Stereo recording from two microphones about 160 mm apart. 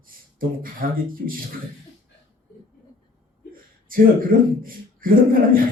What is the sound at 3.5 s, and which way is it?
A man's voice, 60° right (ahead or behind).